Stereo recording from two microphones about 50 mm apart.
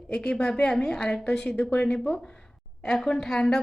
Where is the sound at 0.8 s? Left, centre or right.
Centre.